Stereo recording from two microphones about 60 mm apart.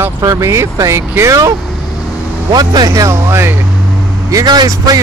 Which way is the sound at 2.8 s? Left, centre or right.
Right.